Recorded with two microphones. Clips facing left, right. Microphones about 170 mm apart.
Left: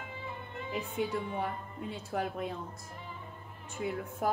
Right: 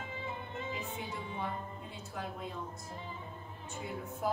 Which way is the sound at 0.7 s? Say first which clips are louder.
Left 7 dB; 60° left (ahead or behind).